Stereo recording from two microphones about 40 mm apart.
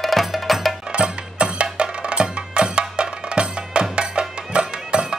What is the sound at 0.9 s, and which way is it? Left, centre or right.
Music, right.